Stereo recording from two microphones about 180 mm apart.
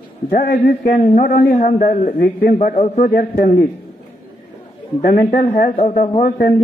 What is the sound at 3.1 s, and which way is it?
Speech, 55° left (ahead or behind).